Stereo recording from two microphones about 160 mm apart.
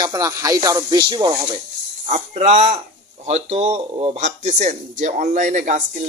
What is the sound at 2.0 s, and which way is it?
Speech, 40° right (ahead or behind).